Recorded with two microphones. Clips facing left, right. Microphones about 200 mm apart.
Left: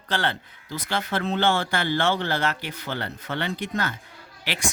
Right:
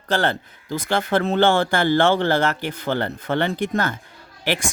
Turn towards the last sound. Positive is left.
turn(degrees=-50)  # may be behind; listen again after turning